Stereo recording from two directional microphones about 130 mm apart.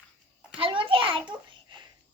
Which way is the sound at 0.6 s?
40° right (ahead or behind).